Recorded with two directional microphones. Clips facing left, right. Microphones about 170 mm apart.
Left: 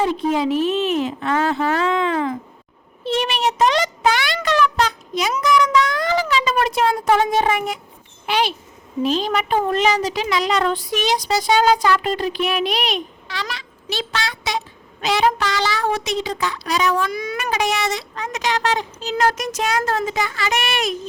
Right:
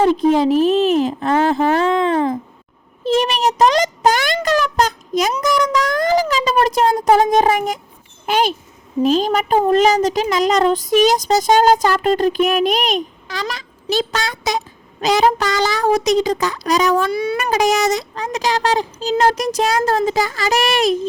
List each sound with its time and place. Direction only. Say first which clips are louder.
0.0 s a child's voice: right 6 dB; 40° right (ahead or behind)